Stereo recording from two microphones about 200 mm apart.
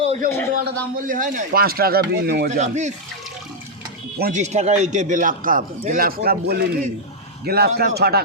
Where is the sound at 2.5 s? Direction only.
35° right (ahead or behind).